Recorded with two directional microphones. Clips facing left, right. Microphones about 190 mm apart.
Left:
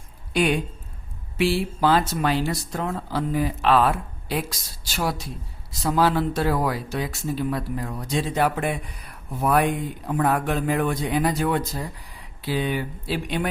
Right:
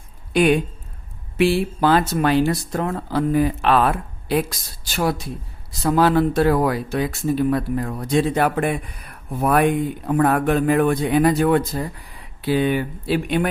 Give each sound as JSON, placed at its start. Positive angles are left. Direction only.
{"t": 1.4, "sound": "speech", "side_deg": -55}